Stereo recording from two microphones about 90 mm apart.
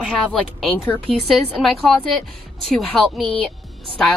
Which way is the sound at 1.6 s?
5° left (ahead or behind).